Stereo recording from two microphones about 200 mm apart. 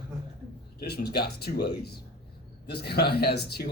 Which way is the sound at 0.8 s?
50° left (ahead or behind).